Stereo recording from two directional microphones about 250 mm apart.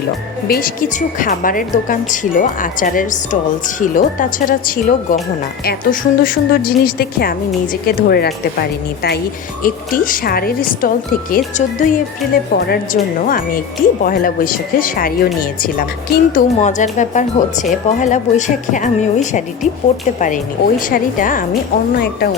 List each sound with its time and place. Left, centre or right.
0.4 s speech: left
9.6 s speech: left